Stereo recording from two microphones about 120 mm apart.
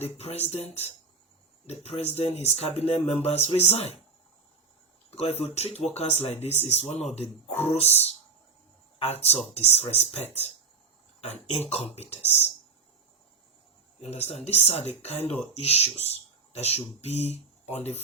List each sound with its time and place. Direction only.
0.0 s speech: 60° left (ahead or behind)
5.1 s speech: 60° left (ahead or behind)
14.0 s speech: 60° left (ahead or behind)